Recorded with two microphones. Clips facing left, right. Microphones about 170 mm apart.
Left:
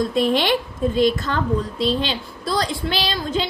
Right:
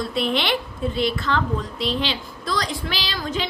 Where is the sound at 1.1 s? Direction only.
45° left (ahead or behind).